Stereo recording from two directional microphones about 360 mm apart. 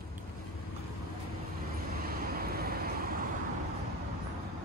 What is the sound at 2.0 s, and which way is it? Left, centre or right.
Vehicle, right.